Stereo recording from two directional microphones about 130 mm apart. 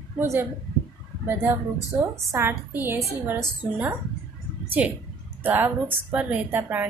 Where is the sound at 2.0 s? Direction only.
20° right (ahead or behind).